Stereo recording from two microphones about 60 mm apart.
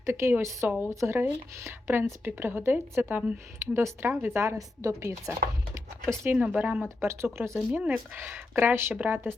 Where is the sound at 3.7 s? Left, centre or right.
Right.